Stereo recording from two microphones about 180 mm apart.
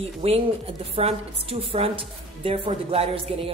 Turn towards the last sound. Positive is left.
turn(degrees=-35)  # may be behind; listen again after turning